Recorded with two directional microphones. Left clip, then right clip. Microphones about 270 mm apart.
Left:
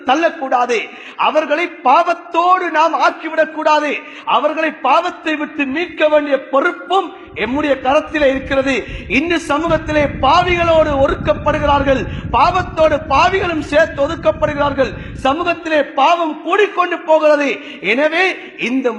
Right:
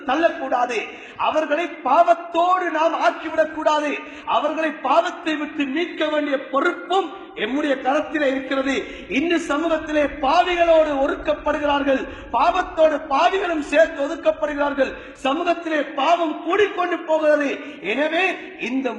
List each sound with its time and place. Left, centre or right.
0.0 s a man's voice: left